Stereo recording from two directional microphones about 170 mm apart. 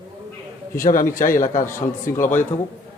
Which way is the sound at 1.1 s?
50° left (ahead or behind).